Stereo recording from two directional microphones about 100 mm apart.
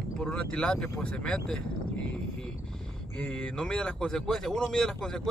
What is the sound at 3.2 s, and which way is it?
Speech, 5° left (ahead or behind).